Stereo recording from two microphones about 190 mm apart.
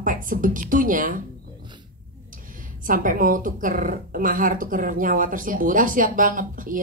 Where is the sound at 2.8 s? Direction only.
45° right (ahead or behind).